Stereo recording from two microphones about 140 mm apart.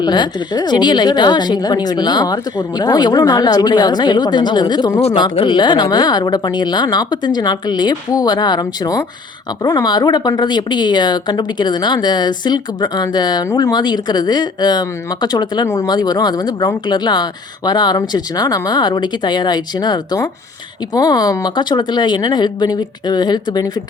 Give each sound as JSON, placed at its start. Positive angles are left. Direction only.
{"t": 0.0, "sound": "speech", "side_deg": 30}